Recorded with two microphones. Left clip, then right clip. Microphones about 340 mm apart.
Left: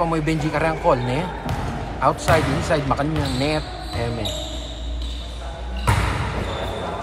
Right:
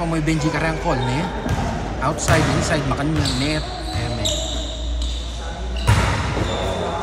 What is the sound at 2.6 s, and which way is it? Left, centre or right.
Speech, centre.